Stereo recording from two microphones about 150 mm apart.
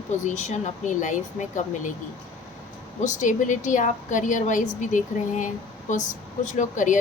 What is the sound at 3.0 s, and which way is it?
A woman's voice, 55° left (ahead or behind).